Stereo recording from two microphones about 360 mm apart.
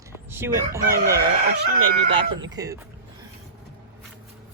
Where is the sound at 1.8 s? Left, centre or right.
Right.